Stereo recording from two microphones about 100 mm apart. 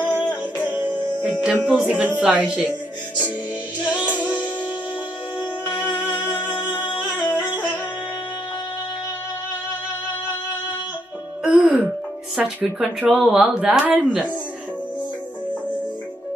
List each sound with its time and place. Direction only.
0.1 s music: 15° left (ahead or behind)
0.8 s speech: 10° right (ahead or behind)
5.7 s music: 15° left (ahead or behind)
11.4 s music: 10° right (ahead or behind)
12.4 s speech: 15° right (ahead or behind)